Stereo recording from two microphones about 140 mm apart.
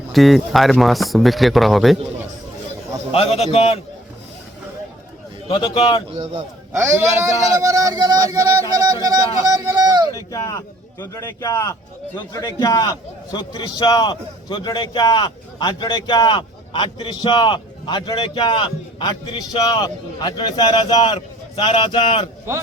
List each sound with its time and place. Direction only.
0.1 s speech: centre (ahead or behind)
3.1 s a man's voice: 45° left (ahead or behind)
5.5 s a man's voice: 35° left (ahead or behind)
6.7 s speech: 20° right (ahead or behind)
10.2 s a man's voice: 25° left (ahead or behind)
21.5 s a man's voice: 40° left (ahead or behind)